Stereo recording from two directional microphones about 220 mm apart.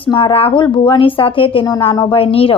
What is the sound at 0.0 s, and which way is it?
A woman's voice, 20° left (ahead or behind).